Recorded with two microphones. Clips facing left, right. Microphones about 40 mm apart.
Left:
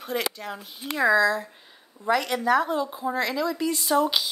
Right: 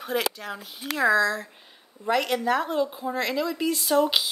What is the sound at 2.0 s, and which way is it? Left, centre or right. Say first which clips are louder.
Speech: left 1 dB; centre.